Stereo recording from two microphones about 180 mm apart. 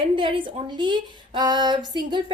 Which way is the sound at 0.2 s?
25° right (ahead or behind).